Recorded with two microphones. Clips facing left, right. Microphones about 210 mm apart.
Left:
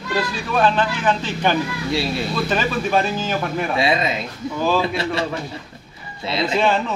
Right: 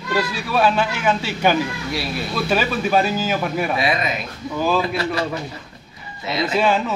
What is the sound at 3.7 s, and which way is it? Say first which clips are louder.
Speech: left 2 dB; 25° left (ahead or behind).